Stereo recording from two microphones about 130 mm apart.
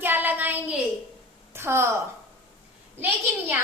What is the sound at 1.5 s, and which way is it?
Speech, 20° right (ahead or behind).